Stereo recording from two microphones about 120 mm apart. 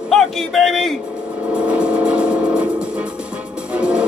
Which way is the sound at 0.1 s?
Centre (ahead or behind).